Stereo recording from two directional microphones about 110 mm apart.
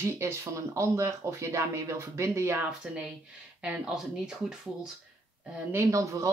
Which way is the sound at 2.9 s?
5° right (ahead or behind).